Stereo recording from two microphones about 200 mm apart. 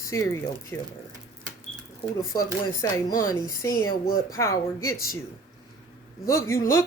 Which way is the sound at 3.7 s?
45° left (ahead or behind).